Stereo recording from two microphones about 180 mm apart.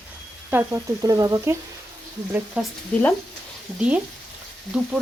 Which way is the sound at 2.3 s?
5° right (ahead or behind).